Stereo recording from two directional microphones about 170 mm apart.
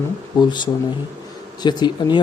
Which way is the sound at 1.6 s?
25° left (ahead or behind).